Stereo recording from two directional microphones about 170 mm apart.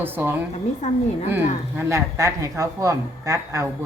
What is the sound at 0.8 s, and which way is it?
Speech, 45° left (ahead or behind).